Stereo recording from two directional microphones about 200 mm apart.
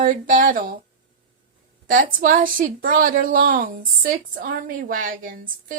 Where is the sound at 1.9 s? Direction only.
45° right (ahead or behind).